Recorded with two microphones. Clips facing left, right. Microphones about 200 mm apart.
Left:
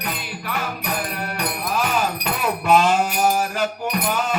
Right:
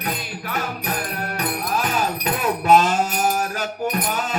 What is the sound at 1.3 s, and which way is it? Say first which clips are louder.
Music: even; 40° right (ahead or behind).